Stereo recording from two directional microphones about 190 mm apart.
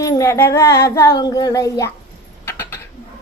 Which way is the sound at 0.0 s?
15° left (ahead or behind).